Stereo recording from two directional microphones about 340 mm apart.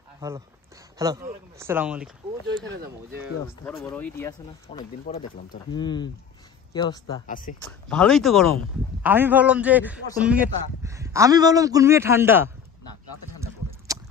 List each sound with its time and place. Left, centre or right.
0.9 s a man's voice: centre
3.6 s a man's voice: centre
4.6 s speech: centre
7.9 s a man's voice: centre